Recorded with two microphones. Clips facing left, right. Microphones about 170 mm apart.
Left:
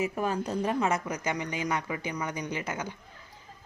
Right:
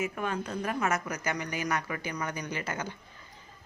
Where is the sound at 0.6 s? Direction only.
25° left (ahead or behind).